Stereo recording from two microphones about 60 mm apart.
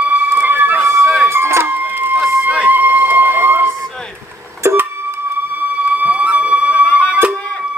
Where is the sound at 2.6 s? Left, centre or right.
Right.